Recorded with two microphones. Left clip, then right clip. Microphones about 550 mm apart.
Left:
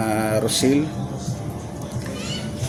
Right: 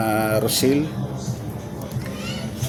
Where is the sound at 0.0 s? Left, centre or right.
Right.